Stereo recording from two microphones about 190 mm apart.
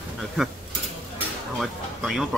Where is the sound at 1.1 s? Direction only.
5° right (ahead or behind).